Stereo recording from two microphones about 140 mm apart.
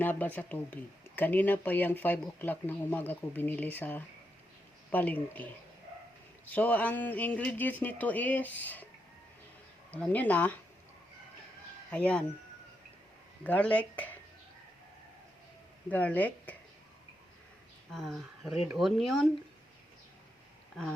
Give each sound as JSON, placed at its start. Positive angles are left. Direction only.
{"t": 0.0, "sound": "speech", "side_deg": 10}
{"t": 9.9, "sound": "speech", "side_deg": 10}
{"t": 11.9, "sound": "speech", "side_deg": 10}
{"t": 13.4, "sound": "speech", "side_deg": 10}
{"t": 15.9, "sound": "speech", "side_deg": 10}
{"t": 17.9, "sound": "speech", "side_deg": 0}